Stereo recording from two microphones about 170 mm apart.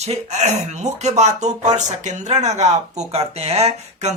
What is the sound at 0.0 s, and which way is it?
Speech, 40° right (ahead or behind).